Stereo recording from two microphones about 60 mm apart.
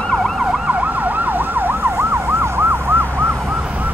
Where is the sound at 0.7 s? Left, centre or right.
Right.